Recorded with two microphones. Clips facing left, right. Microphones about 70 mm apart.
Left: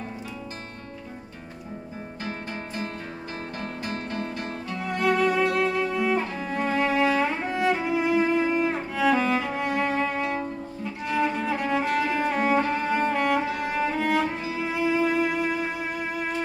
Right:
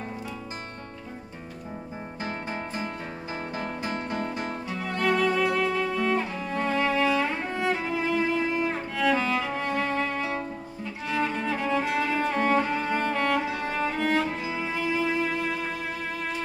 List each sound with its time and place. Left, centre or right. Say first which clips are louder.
2.2 s music: right 2 dB; centre
4.7 s music: left 2 dB; centre